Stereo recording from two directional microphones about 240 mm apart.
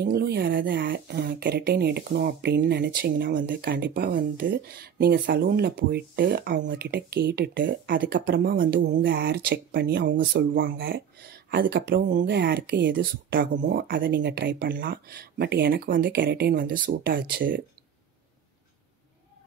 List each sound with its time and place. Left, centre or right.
0.0 s speech: right
9.0 s speech: right